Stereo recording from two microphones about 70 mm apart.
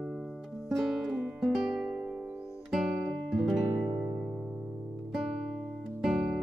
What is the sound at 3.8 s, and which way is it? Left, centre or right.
Music, right.